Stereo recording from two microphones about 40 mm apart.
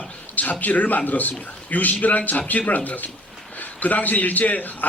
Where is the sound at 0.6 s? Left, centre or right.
Left.